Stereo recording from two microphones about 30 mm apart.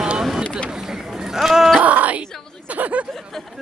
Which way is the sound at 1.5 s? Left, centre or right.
Centre.